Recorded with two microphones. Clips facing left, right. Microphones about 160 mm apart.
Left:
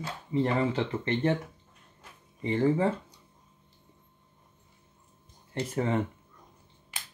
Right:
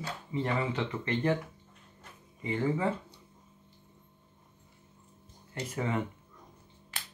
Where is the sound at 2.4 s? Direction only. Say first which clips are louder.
Left 5 dB; 35° left (ahead or behind).